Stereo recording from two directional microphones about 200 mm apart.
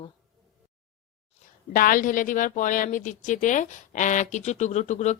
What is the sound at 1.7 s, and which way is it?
A woman's voice, 45° left (ahead or behind).